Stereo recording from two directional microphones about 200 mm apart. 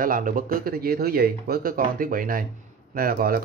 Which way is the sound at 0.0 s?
45° right (ahead or behind).